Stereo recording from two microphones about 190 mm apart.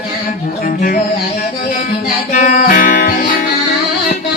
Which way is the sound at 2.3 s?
45° left (ahead or behind).